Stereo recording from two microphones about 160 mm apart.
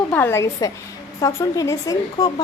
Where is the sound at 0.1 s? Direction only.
15° left (ahead or behind).